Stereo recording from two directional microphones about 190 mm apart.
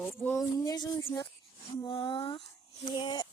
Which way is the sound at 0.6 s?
20° left (ahead or behind).